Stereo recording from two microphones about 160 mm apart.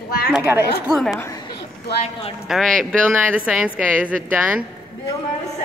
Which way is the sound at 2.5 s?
Centre (ahead or behind).